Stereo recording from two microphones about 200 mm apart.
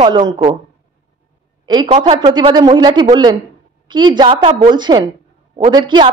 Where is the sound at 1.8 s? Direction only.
30° right (ahead or behind).